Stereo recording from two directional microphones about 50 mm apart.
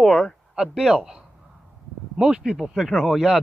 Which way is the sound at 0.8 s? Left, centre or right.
Centre.